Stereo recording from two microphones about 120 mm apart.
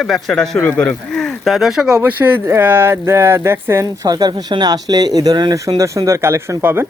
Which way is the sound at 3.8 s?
35° right (ahead or behind).